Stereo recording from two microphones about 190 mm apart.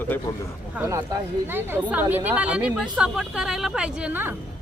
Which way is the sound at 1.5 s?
10° right (ahead or behind).